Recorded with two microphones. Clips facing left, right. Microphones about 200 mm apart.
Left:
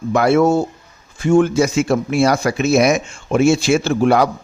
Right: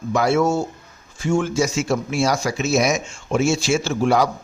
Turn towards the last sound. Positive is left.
turn(degrees=60)  # may be behind; listen again after turning